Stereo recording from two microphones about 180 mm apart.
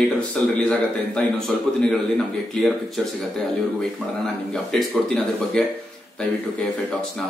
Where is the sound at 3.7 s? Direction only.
Centre (ahead or behind).